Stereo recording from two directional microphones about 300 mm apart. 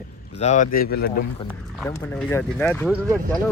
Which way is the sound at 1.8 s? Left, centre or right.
Centre.